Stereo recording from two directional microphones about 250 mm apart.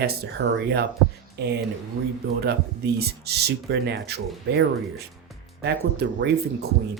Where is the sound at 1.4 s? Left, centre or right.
Right.